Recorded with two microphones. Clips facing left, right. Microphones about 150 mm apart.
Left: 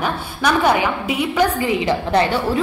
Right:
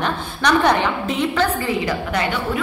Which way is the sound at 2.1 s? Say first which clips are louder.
Left 6 dB; 30° left (ahead or behind).